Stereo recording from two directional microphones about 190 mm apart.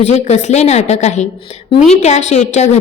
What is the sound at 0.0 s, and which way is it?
A woman's voice, 35° left (ahead or behind).